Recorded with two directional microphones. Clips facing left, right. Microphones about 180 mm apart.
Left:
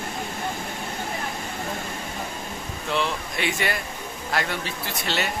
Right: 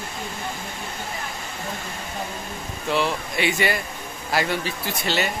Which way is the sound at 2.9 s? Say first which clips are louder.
Right 3 dB; 5° right (ahead or behind).